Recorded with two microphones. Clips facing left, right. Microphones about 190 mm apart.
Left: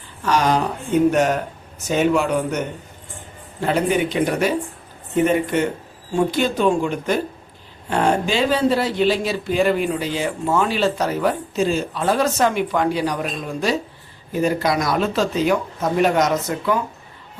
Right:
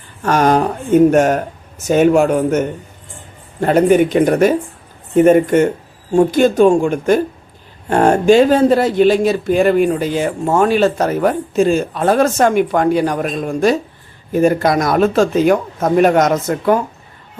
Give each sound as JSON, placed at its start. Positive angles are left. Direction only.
{"t": 0.2, "sound": "speech", "side_deg": -50}